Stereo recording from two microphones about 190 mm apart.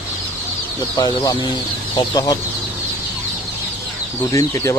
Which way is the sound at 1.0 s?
20° left (ahead or behind).